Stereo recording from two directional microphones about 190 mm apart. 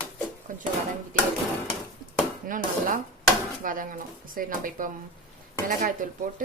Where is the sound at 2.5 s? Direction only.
45° right (ahead or behind).